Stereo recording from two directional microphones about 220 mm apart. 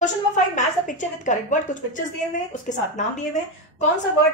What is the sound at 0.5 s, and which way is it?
A woman's voice, 35° left (ahead or behind).